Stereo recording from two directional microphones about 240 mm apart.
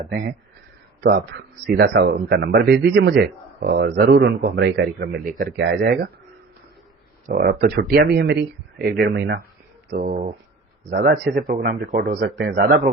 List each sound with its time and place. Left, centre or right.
0.1 s speech: right
7.3 s speech: right
9.9 s speech: right